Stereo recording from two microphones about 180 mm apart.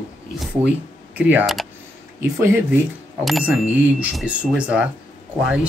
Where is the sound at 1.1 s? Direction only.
10° right (ahead or behind).